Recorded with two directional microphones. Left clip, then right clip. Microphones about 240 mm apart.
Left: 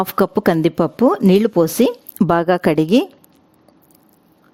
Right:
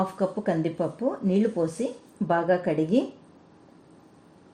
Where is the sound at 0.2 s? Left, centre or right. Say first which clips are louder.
Left 11 dB; left.